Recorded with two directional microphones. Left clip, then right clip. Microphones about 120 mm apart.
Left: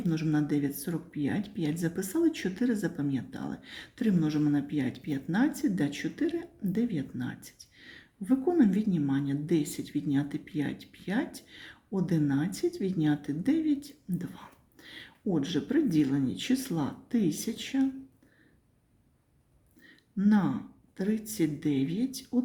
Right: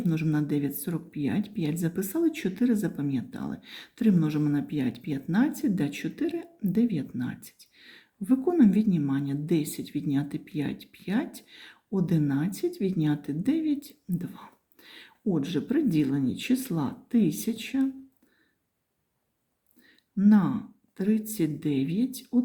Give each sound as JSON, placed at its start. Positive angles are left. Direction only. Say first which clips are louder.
{"t": 0.0, "sound": "speech", "louder": "right 1 dB", "side_deg": -30}
{"t": 19.8, "sound": "speech", "louder": "right 5 dB", "side_deg": -25}